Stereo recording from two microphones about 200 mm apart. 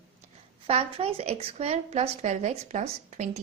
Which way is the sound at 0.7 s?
30° right (ahead or behind).